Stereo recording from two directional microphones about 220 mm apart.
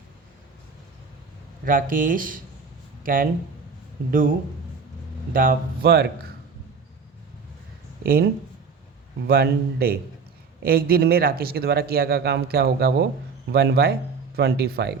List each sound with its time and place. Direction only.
1.6 s speech: 40° right (ahead or behind)
5.3 s speech: 40° right (ahead or behind)
8.0 s speech: 45° right (ahead or behind)